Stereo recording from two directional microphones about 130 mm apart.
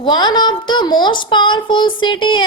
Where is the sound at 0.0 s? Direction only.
35° left (ahead or behind).